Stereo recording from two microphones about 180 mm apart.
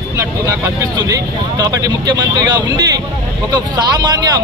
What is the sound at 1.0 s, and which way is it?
Speech, 20° right (ahead or behind).